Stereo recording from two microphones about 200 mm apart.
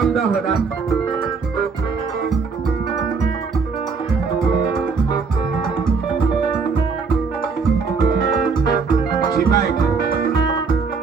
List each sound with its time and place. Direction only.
0.0 s speech: centre (ahead or behind)
9.2 s music: 20° left (ahead or behind)